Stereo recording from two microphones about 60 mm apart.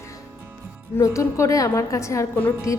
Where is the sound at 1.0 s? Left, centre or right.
Left.